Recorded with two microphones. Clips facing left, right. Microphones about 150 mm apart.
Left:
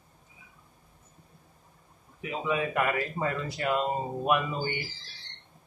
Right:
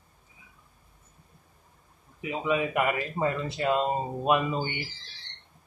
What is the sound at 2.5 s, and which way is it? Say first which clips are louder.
Speech: right 2 dB; 20° right (ahead or behind).